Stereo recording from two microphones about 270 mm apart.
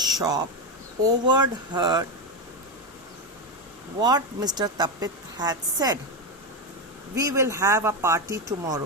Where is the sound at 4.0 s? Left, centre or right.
Centre.